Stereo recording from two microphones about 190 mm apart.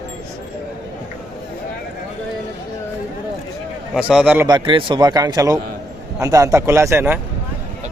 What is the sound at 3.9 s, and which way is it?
Speech, 5° right (ahead or behind).